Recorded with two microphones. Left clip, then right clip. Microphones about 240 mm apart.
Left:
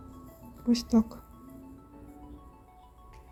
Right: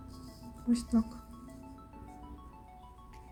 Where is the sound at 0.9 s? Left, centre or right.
Centre.